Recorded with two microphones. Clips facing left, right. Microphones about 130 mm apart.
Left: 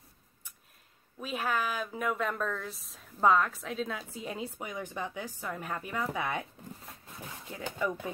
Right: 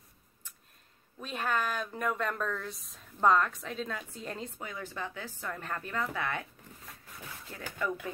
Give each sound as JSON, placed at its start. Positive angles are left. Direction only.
{"t": 1.2, "sound": "a woman's voice", "side_deg": 5}
{"t": 6.9, "sound": "a sound", "side_deg": 25}
{"t": 7.6, "sound": "speech", "side_deg": 25}